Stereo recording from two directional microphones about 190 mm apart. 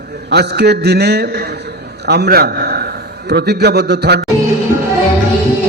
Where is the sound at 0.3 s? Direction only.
60° right (ahead or behind).